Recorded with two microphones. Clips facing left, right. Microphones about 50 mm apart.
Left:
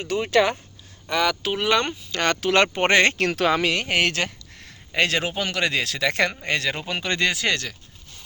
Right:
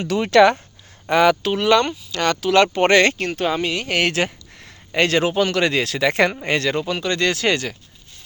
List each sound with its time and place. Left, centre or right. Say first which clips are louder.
0.0 s speech: right 6 dB; right
1.1 s speech: right 7 dB; right
1.4 s speech: right 5 dB; centre
2.1 s speech: right 3 dB; left
2.7 s speech: right 3 dB; left
3.2 s speech: left 1 dB; left
4.0 s a sound: right 3 dB; centre
4.9 s speech: right 5 dB; centre
6.0 s speech: right 5 dB; centre
6.6 s speech: right 6 dB; centre
6.8 s speech: right 3 dB; left
7.4 s speech: right 4 dB; centre